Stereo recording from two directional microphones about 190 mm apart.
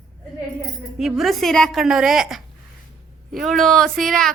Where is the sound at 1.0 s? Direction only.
Centre (ahead or behind).